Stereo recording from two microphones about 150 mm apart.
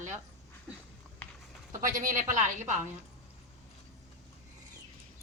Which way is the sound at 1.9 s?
60° right (ahead or behind).